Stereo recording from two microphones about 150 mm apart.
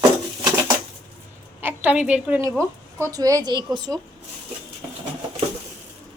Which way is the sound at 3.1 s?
25° right (ahead or behind).